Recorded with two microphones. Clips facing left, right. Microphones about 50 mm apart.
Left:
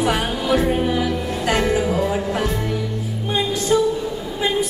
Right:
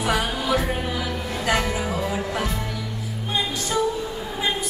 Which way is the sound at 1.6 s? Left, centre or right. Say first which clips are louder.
Left 6 dB; left.